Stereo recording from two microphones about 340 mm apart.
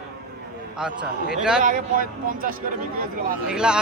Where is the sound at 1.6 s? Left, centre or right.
Right.